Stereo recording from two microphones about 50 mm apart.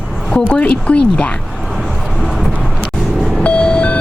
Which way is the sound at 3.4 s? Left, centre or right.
Left.